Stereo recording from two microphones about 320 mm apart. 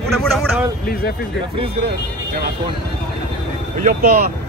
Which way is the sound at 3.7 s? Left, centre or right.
Right.